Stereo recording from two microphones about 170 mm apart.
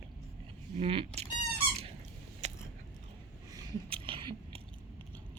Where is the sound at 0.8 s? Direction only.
35° right (ahead or behind).